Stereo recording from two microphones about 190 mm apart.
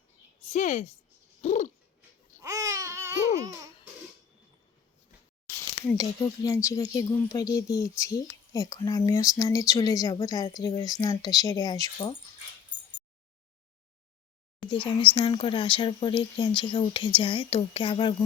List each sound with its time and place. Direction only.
0.4 s a woman's voice: 40° left (ahead or behind)
1.4 s a sound: 40° left (ahead or behind)
2.4 s babbling: 15° right (ahead or behind)
6.0 s speech: 15° left (ahead or behind)
14.7 s speech: 25° left (ahead or behind)